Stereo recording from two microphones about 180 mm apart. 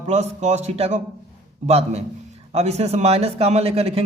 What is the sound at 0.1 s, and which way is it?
A man's voice, 40° right (ahead or behind).